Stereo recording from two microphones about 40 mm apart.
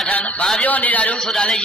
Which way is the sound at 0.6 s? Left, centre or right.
Left.